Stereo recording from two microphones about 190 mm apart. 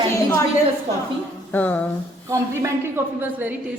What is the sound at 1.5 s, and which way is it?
Speech, 10° left (ahead or behind).